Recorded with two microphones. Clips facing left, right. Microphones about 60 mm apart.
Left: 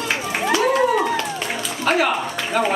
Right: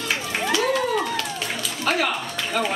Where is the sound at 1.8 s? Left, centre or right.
Left.